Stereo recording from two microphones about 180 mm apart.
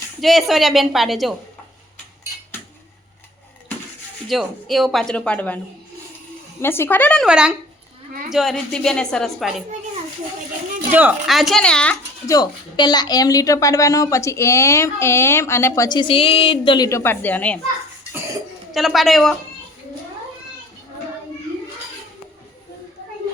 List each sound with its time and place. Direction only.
0.2 s a woman's voice: centre (ahead or behind)
4.3 s a woman's voice: centre (ahead or behind)
6.6 s a woman's voice: 15° left (ahead or behind)
7.3 s a woman's voice: 5° right (ahead or behind)
10.9 s a woman's voice: 5° right (ahead or behind)
12.2 s a woman's voice: 20° left (ahead or behind)
18.7 s a woman's voice: centre (ahead or behind)